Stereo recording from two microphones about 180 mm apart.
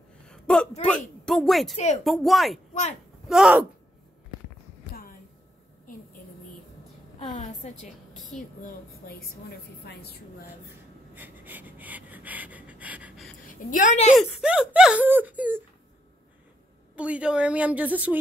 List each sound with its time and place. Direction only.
0.3 s a sound: 5° left (ahead or behind)
0.8 s a woman's voice: 5° left (ahead or behind)
2.7 s speech: 40° left (ahead or behind)
3.3 s a woman's voice: centre (ahead or behind)
7.2 s a woman's voice: 40° left (ahead or behind)
9.8 s a woman's voice: 65° left (ahead or behind)
11.1 s a sound: 10° right (ahead or behind)
13.5 s a woman's voice: 50° left (ahead or behind)
14.1 s speech: 5° right (ahead or behind)
16.9 s speech: 5° right (ahead or behind)